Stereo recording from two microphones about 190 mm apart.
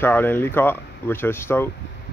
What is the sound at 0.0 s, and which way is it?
Speech, 10° left (ahead or behind).